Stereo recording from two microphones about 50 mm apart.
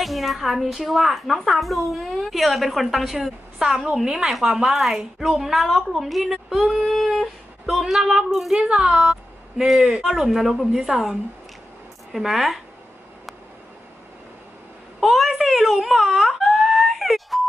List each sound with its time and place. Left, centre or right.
0.0 s a woman's voice: centre
8.5 s speech: centre
9.7 s a woman's voice: centre
15.0 s wail: centre